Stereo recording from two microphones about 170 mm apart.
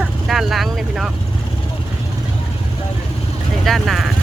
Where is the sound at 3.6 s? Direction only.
Centre (ahead or behind).